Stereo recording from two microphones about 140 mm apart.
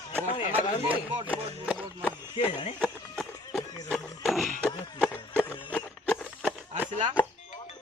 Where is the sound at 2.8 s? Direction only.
Centre (ahead or behind).